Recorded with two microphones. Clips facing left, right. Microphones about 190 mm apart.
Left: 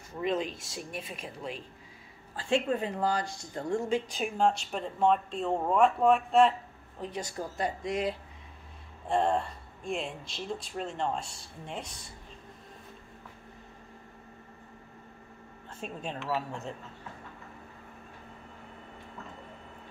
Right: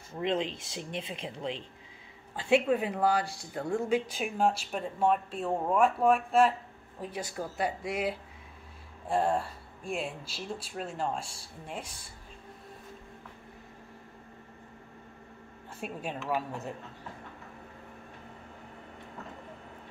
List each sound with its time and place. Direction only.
0.1 s speech: 25° right (ahead or behind)
2.3 s speech: 10° right (ahead or behind)
15.8 s speech: 10° right (ahead or behind)